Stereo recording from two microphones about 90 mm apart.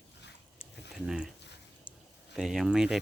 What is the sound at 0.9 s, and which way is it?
Speech, 5° right (ahead or behind).